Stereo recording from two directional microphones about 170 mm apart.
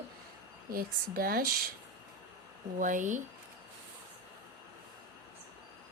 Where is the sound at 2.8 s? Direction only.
50° right (ahead or behind).